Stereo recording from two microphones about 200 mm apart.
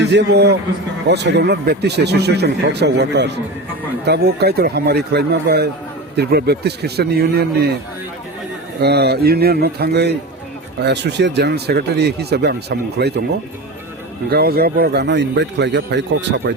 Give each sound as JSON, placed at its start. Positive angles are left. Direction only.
{"t": 0.0, "sound": "speech", "side_deg": -60}
{"t": 8.8, "sound": "speech", "side_deg": -55}
{"t": 14.3, "sound": "speech", "side_deg": -50}